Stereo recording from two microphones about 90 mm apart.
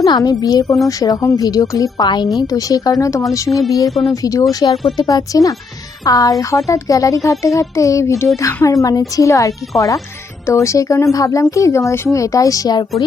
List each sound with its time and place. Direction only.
0.0 s a woman's voice: 45° left (ahead or behind)
2.0 s a woman's voice: 55° left (ahead or behind)
2.5 s speech: 40° left (ahead or behind)
3.8 s speech: centre (ahead or behind)
4.1 s speech: 40° left (ahead or behind)